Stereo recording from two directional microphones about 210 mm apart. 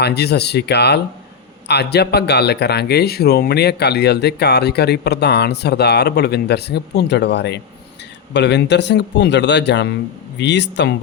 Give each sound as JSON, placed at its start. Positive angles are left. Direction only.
{"t": 0.0, "sound": "speech", "side_deg": 50}